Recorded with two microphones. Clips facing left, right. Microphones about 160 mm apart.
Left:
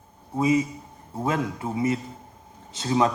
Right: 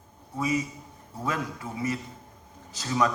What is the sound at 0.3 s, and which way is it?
A man's voice, 25° left (ahead or behind).